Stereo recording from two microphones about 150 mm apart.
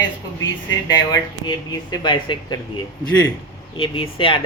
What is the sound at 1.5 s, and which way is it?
Speech, 30° left (ahead or behind).